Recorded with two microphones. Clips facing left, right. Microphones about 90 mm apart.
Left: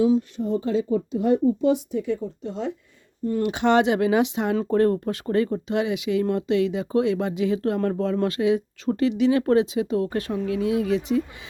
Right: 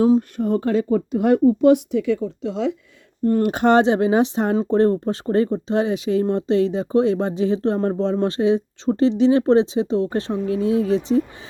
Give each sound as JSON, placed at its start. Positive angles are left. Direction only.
{"t": 0.0, "sound": "speech", "side_deg": -50}
{"t": 3.2, "sound": "speech", "side_deg": -50}